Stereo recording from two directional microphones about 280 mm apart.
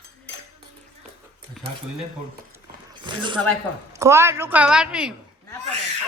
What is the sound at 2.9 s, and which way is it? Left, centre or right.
A woman's voice, centre.